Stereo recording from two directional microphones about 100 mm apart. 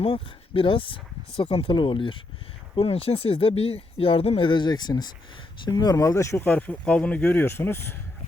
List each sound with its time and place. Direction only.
0.0 s speech: 65° left (ahead or behind)
1.7 s speech: 55° left (ahead or behind)
2.7 s speech: 75° left (ahead or behind); by 6.4 s 30° left (ahead or behind)
6.4 s speech: 15° left (ahead or behind)
7.4 s speech: 25° left (ahead or behind)